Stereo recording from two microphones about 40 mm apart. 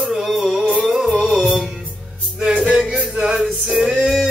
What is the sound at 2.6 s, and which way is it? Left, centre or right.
Music, centre.